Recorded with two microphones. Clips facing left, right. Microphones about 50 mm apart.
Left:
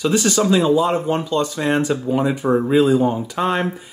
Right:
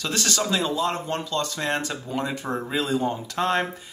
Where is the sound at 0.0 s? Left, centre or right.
Centre.